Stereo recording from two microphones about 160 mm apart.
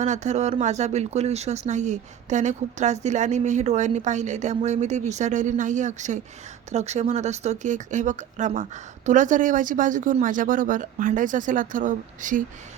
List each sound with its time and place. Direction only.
0.0 s a woman's voice: 45° right (ahead or behind)